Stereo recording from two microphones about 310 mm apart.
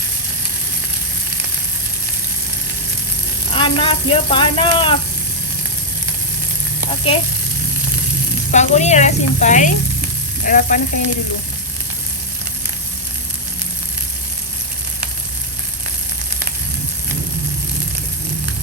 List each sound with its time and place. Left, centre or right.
3.5 s speech: centre
8.5 s speech: left